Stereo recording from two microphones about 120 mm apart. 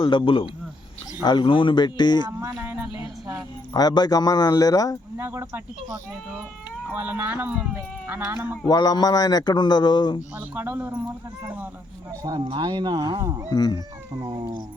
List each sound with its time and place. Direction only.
0.0 s a man's voice: 45° left (ahead or behind)
2.4 s a sound: 20° right (ahead or behind)
3.8 s a man's voice: 35° left (ahead or behind)
5.1 s speech: 20° right (ahead or behind)
6.9 s speech: 15° right (ahead or behind)
8.6 s a man's voice: 35° left (ahead or behind)
10.3 s speech: 15° right (ahead or behind)
12.5 s speech: 35° right (ahead or behind)
13.5 s a man's voice: 35° left (ahead or behind)